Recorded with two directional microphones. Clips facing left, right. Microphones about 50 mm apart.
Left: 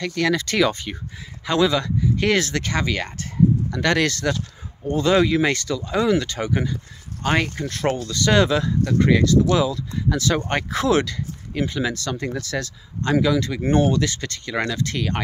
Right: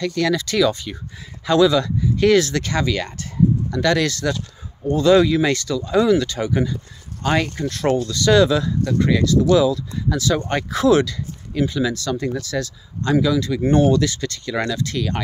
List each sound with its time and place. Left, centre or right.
0.0 s speech: left
1.4 s speech: left
3.8 s speech: left
4.8 s speech: left
14.5 s speech: left
14.8 s speech: left